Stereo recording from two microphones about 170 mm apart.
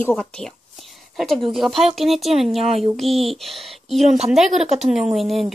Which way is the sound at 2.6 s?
35° right (ahead or behind).